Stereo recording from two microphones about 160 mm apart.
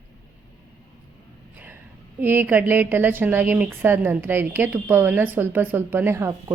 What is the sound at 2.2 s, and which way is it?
A woman's voice, 10° right (ahead or behind).